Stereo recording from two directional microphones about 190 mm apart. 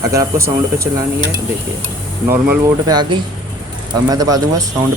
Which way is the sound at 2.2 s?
15° right (ahead or behind).